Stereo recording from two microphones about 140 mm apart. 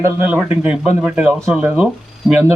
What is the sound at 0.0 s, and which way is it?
Speech, 15° right (ahead or behind).